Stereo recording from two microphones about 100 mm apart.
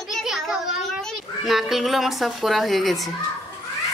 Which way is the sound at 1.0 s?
Centre (ahead or behind).